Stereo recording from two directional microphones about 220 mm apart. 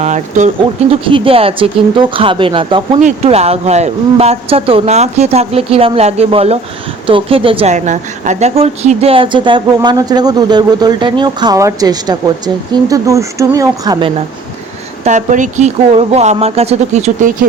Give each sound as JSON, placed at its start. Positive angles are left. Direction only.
{"t": 0.0, "sound": "a woman's voice", "side_deg": -30}
{"t": 15.0, "sound": "speech", "side_deg": -35}